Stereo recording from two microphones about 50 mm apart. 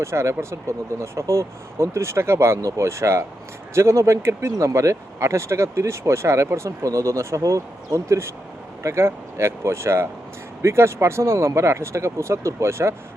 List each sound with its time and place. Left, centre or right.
0.0 s speech: right
8.8 s speech: right